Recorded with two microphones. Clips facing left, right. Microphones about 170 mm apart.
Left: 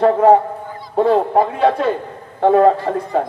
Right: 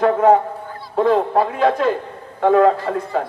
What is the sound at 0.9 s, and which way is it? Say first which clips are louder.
A man's voice: left 2 dB; 30° left (ahead or behind).